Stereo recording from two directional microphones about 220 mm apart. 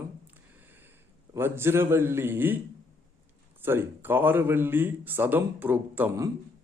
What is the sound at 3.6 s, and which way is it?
A man's voice, 10° right (ahead or behind).